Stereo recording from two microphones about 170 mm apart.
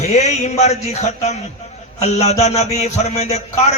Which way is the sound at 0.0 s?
40° left (ahead or behind).